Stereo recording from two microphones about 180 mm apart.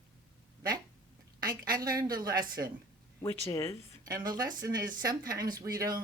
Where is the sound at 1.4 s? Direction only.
55° right (ahead or behind).